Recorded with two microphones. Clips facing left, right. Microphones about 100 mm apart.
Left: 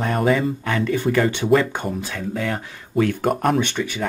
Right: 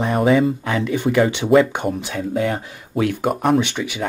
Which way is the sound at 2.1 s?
25° right (ahead or behind).